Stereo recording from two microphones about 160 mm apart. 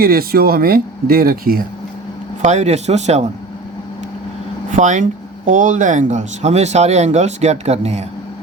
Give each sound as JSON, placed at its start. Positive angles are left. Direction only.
{"t": 0.0, "sound": "speech", "side_deg": -70}
{"t": 2.4, "sound": "speech", "side_deg": -45}
{"t": 4.7, "sound": "speech", "side_deg": -50}